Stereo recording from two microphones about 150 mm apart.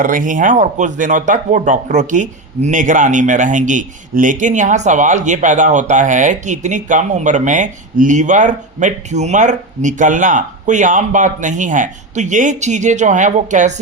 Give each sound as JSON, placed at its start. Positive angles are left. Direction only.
{"t": 0.0, "sound": "speech", "side_deg": -60}